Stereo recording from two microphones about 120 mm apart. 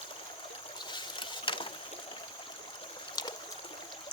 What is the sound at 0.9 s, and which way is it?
Boat, 40° left (ahead or behind).